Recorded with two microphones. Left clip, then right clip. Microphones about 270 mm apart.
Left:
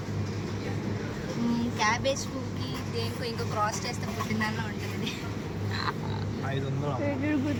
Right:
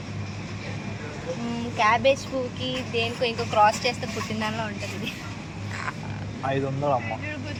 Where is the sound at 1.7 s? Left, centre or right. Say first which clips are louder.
Right 8 dB; centre.